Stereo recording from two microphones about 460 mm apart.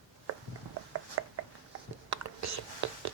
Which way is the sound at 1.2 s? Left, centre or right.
Right.